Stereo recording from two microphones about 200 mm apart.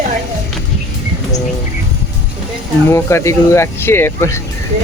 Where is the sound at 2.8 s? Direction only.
15° left (ahead or behind).